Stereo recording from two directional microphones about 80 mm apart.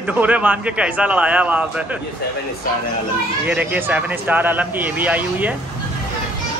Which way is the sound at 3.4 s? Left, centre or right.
Centre.